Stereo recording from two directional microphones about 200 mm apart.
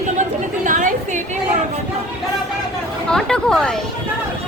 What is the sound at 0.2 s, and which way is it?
Chatter, 40° right (ahead or behind).